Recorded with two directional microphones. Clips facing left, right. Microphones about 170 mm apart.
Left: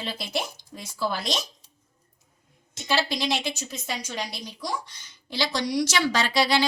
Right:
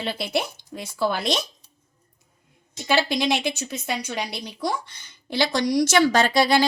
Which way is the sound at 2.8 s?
55° right (ahead or behind).